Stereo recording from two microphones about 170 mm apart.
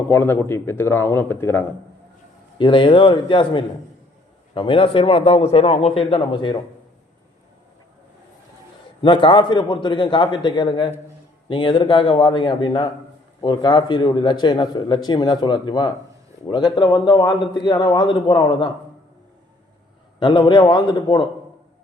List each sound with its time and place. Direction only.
0.1 s speech: 15° left (ahead or behind)
2.6 s a man's voice: 30° left (ahead or behind)
9.0 s a man's voice: 30° left (ahead or behind)
20.1 s a man's voice: 30° left (ahead or behind)